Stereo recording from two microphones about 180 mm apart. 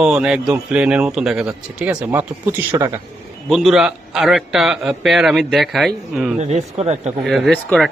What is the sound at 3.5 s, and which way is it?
A man's voice, centre (ahead or behind).